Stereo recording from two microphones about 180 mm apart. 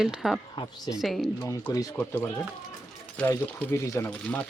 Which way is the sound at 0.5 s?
25° left (ahead or behind).